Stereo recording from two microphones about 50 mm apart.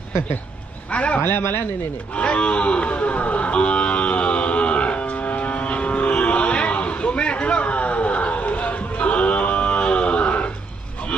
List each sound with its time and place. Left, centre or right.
0.9 s speech: left
1.2 s speech: left
2.1 s a sound: left